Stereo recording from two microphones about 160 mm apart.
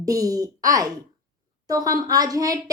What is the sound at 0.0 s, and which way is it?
A woman's voice, 20° right (ahead or behind).